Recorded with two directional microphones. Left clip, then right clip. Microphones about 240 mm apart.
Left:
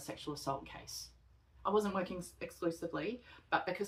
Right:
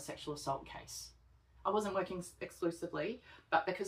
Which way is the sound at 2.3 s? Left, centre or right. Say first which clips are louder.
Even; left.